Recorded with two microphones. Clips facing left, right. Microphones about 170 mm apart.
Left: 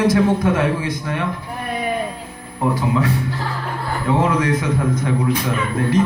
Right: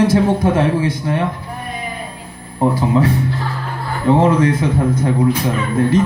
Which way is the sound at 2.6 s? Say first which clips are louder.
Right 4 dB; 30° right (ahead or behind).